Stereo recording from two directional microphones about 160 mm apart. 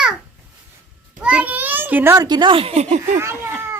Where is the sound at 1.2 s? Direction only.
5° right (ahead or behind).